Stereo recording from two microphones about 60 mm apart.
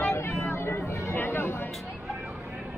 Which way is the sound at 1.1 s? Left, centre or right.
Left.